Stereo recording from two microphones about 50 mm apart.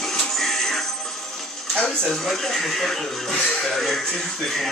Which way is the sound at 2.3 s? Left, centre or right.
Centre.